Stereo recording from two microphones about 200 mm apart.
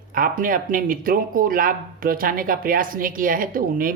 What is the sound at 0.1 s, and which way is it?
Speech, 45° right (ahead or behind).